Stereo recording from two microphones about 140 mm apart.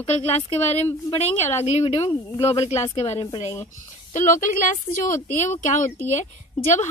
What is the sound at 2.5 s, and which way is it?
Speech, 45° left (ahead or behind).